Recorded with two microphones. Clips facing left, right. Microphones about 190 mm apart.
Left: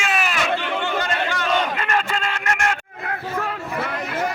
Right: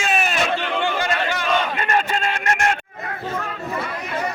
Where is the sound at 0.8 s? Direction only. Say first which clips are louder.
Right 1 dB; 10° right (ahead or behind).